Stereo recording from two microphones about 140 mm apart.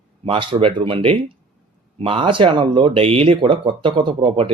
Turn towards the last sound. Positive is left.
turn(degrees=-35)  # may be behind; listen again after turning